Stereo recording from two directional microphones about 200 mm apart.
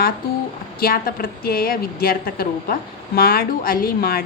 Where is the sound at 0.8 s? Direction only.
45° left (ahead or behind).